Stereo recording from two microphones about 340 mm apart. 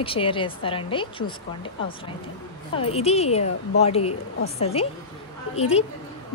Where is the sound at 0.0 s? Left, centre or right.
Centre.